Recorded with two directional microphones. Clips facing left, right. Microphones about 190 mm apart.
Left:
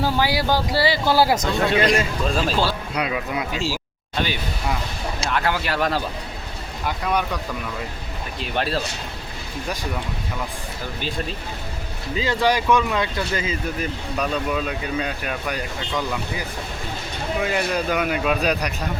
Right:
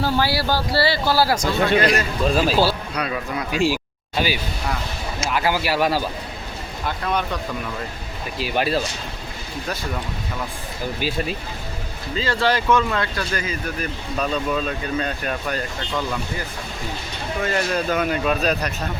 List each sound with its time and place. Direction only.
0.0 s speech: 15° left (ahead or behind)
1.5 s speech: centre (ahead or behind)
2.9 s speech: 20° left (ahead or behind)
4.1 s speech: 5° right (ahead or behind)
6.8 s speech: 10° left (ahead or behind)
8.4 s speech: 5° right (ahead or behind)
12.1 s speech: 15° left (ahead or behind)
14.2 s speech: 10° left (ahead or behind)
17.4 s speech: 10° left (ahead or behind)